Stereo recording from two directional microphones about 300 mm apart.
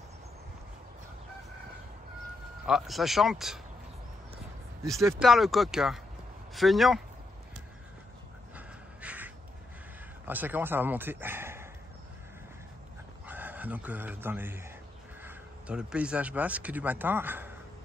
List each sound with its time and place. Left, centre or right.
2.6 s speech: centre
5.0 s speech: centre
8.5 s pant: centre
10.2 s speech: centre
13.3 s speech: centre